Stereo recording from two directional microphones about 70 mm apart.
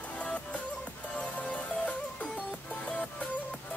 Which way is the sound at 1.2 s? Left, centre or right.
Centre.